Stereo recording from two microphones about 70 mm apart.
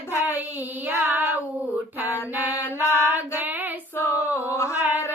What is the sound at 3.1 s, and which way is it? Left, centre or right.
Child singing, right.